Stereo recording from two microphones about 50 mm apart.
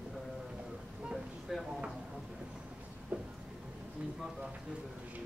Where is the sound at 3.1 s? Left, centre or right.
Right.